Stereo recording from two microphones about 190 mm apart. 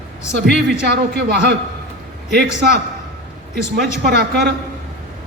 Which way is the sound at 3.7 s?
60° right (ahead or behind).